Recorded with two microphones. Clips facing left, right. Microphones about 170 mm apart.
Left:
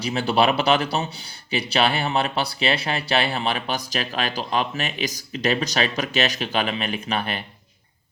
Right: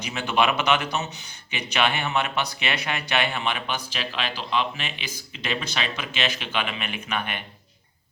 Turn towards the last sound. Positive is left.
turn(degrees=35)  # may be behind; listen again after turning